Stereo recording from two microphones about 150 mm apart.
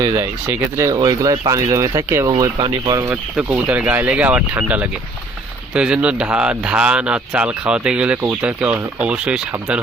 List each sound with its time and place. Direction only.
0.4 s speech: 15° right (ahead or behind)
2.3 s speech: 30° right (ahead or behind)
3.3 s speech: 10° right (ahead or behind)